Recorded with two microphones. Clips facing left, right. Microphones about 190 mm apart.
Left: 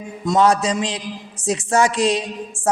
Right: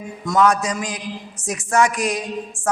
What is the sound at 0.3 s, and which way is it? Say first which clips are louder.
A woman's voice: left 2 dB; 30° left (ahead or behind).